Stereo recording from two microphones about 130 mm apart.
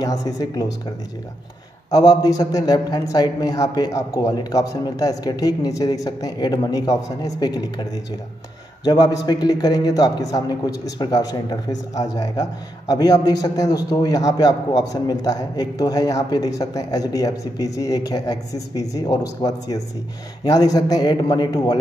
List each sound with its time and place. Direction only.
0.0 s a man's voice: 30° left (ahead or behind)
1.9 s a man's voice: 30° left (ahead or behind)